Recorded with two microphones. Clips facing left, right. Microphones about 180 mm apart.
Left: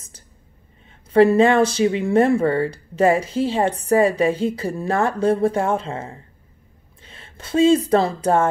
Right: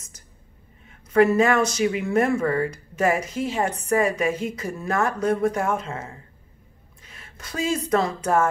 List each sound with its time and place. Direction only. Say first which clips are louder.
0.8 s speech: left 4 dB; 30° left (ahead or behind)